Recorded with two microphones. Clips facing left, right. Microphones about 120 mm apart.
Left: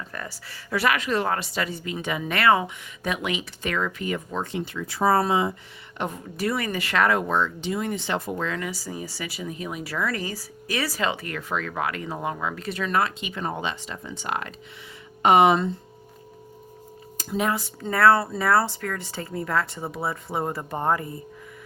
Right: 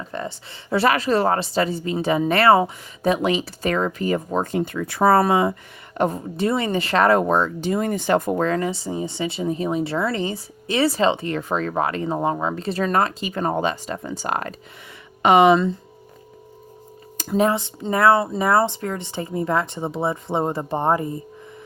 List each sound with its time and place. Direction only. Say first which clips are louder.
0.1 s speech: right 7 dB; 25° right (ahead or behind); by 5.5 s 55° right (ahead or behind)
6.0 s speech: right 9 dB; 40° right (ahead or behind)
6.3 s speech: right 5 dB; 25° right (ahead or behind)
8.7 s speech: right 7 dB; 25° right (ahead or behind); by 14.5 s 40° right (ahead or behind)
15.2 s speech: right 3 dB; 90° right
17.3 s speech: right 6 dB; 30° right (ahead or behind)